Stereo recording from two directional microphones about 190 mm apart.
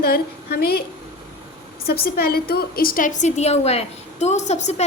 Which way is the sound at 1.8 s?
55° left (ahead or behind).